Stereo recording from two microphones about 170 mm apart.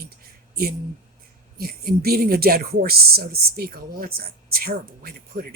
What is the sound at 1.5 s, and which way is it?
Speech, 60° right (ahead or behind).